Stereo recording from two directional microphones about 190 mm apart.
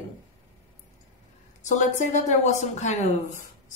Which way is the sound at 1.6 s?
40° left (ahead or behind).